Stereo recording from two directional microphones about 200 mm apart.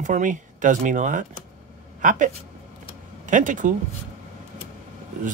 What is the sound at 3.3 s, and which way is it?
Speech, 40° right (ahead or behind).